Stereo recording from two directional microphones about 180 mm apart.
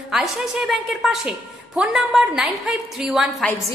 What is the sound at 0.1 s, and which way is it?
A woman's voice, centre (ahead or behind).